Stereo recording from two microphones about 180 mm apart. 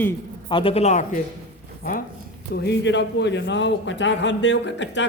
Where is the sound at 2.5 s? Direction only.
70° left (ahead or behind).